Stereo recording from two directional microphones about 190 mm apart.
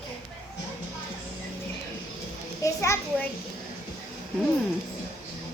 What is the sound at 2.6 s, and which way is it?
Children playing, 15° left (ahead or behind).